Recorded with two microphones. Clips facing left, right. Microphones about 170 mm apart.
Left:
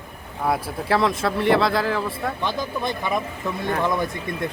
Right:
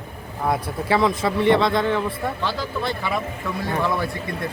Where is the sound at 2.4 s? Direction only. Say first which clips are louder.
Left 1 dB; 15° left (ahead or behind).